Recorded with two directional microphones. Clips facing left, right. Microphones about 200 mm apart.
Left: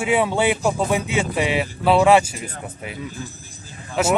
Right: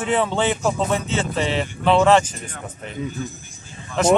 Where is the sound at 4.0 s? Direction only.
10° left (ahead or behind).